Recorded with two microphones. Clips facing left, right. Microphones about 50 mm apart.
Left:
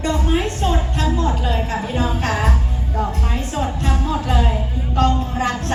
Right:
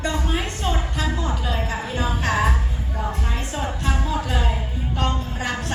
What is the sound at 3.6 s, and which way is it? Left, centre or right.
Music, centre.